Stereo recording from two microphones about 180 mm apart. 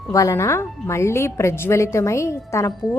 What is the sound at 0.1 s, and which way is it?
A woman's voice, 15° left (ahead or behind).